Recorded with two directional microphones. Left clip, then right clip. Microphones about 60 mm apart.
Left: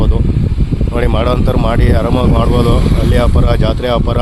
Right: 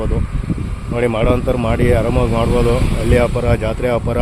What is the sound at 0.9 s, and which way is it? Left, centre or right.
Speech, left.